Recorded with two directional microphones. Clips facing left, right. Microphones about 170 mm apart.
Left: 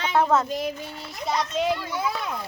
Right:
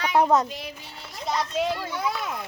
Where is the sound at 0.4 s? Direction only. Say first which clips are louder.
Left 8 dB; 45° left (ahead or behind).